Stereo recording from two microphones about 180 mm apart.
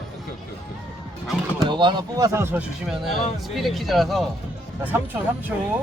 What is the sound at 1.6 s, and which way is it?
Speech, 25° right (ahead or behind).